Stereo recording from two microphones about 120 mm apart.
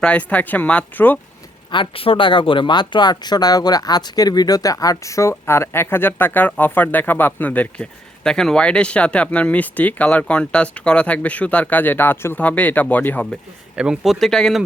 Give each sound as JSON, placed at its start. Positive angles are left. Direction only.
{"t": 0.0, "sound": "speech", "side_deg": 10}
{"t": 1.7, "sound": "speech", "side_deg": 45}
{"t": 13.7, "sound": "speech", "side_deg": -5}